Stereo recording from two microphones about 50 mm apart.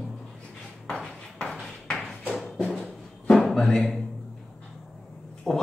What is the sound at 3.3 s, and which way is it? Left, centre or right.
Music, centre.